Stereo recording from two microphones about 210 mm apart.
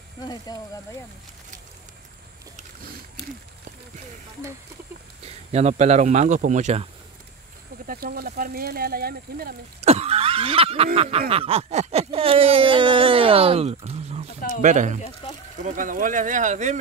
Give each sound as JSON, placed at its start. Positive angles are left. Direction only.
{"t": 0.2, "sound": "speech", "side_deg": 20}
{"t": 5.2, "sound": "speech", "side_deg": -30}
{"t": 7.8, "sound": "speech", "side_deg": -45}
{"t": 9.8, "sound": "cough", "side_deg": -30}
{"t": 11.0, "sound": "speech", "side_deg": -25}